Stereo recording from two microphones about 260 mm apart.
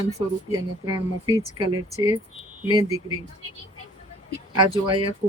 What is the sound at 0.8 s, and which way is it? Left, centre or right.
Speech, centre.